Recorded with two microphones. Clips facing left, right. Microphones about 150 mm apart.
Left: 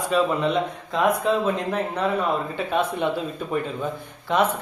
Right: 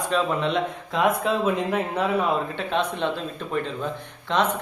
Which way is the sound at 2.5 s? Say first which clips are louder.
Left 2 dB; 10° left (ahead or behind).